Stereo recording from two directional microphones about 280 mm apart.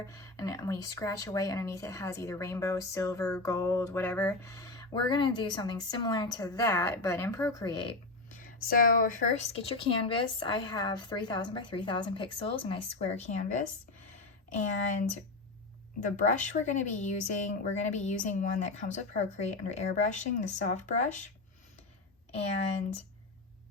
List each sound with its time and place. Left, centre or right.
0.0 s speech: centre
8.7 s a woman's voice: left
16.0 s a woman's voice: left